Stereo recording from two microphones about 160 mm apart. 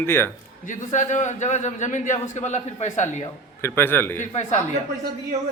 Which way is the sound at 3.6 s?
15° left (ahead or behind).